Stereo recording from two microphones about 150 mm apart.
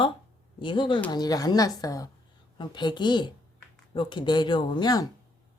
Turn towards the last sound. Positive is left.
turn(degrees=25)  # may be behind; listen again after turning